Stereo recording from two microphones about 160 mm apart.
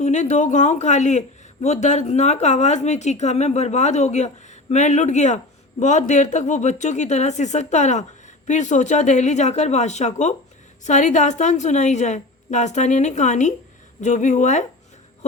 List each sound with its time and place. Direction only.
0.0 s a woman's voice: 50° left (ahead or behind)